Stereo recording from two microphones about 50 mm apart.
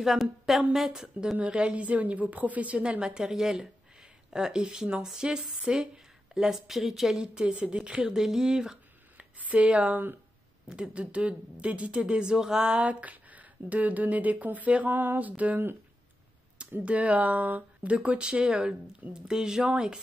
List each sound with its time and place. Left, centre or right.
0.0 s speech: centre
1.4 s speech: right; by 7.2 s centre
7.6 s speech: centre
9.4 s speech: right
12.8 s speech: right
16.8 s speech: right; by 19.7 s centre